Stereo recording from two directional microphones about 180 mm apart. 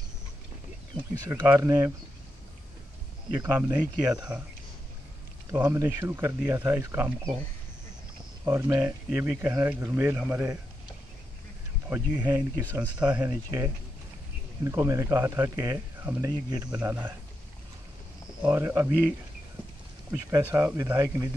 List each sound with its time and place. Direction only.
1.2 s speech: 20° right (ahead or behind)
3.3 s speech: 10° right (ahead or behind)
5.5 s speech: 15° right (ahead or behind)
8.5 s speech: 15° right (ahead or behind)
11.9 s speech: 10° right (ahead or behind)
18.4 s speech: 10° right (ahead or behind)